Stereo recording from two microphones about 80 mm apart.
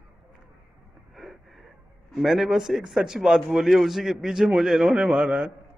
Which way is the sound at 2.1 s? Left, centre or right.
Centre.